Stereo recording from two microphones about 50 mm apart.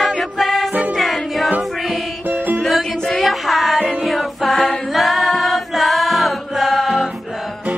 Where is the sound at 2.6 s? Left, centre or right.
Centre.